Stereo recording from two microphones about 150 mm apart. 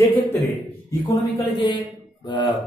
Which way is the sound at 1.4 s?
30° left (ahead or behind).